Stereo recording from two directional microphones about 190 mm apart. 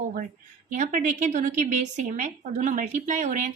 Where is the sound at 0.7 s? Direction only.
45° right (ahead or behind).